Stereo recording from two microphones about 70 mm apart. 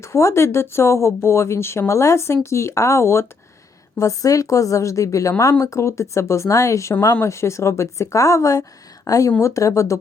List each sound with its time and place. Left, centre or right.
0.0 s speech: left
3.9 s speech: left